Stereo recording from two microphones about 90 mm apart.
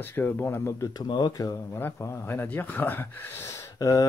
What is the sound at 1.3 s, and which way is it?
Speech, 40° left (ahead or behind).